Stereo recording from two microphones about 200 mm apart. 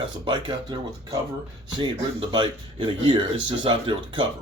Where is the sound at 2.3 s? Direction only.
25° right (ahead or behind).